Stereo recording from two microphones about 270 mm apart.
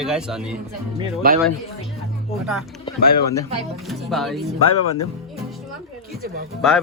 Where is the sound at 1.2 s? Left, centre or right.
Right.